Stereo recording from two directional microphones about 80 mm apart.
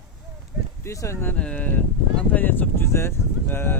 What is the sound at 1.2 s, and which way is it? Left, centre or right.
Speech, centre.